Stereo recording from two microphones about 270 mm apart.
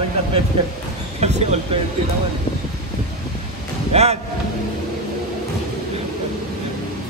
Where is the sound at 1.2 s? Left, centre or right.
Right.